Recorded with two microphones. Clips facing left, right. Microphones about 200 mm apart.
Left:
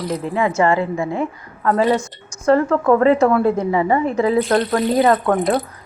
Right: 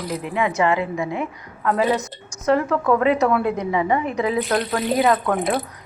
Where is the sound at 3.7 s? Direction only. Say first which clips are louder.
Left 3 dB; 45° left (ahead or behind).